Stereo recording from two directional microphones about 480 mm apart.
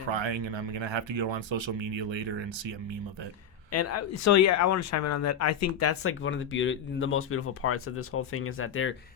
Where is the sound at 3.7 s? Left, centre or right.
Left.